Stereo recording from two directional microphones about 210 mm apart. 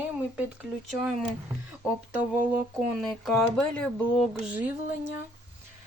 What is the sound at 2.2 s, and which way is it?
Speech, 5° right (ahead or behind).